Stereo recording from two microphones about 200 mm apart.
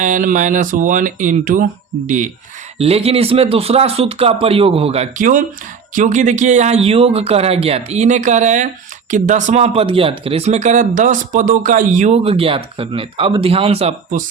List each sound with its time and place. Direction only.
0.0 s speech: 40° right (ahead or behind)